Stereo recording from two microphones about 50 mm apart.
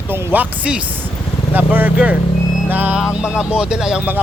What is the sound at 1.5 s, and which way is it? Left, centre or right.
Speech, right.